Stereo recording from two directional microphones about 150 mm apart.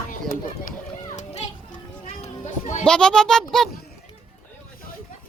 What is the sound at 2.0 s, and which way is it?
Children playing, 55° left (ahead or behind).